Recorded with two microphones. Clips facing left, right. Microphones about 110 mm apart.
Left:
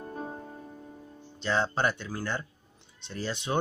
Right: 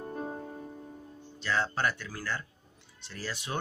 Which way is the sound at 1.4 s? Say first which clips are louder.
Left 3 dB; 25° left (ahead or behind).